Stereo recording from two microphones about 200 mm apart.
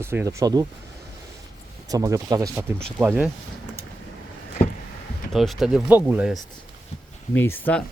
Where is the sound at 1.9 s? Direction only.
15° right (ahead or behind).